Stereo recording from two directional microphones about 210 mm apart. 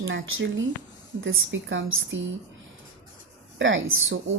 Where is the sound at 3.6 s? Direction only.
65° right (ahead or behind).